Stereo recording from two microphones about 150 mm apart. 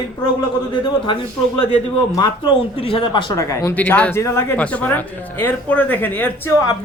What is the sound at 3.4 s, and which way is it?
Speech, 20° left (ahead or behind).